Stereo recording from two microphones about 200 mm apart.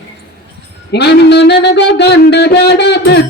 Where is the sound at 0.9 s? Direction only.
60° left (ahead or behind).